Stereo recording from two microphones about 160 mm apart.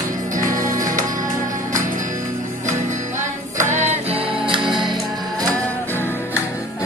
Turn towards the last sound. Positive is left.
turn(degrees=0)  # may be behind; listen again after turning